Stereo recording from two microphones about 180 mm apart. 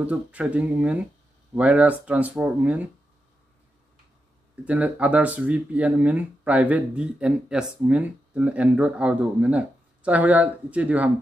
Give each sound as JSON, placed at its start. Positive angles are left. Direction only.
{"t": 0.0, "sound": "speech", "side_deg": -5}
{"t": 4.6, "sound": "speech", "side_deg": -10}